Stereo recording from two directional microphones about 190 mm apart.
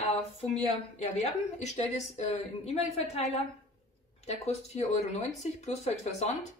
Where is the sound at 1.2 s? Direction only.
35° left (ahead or behind).